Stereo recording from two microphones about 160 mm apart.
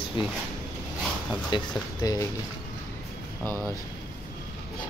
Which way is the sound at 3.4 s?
15° left (ahead or behind).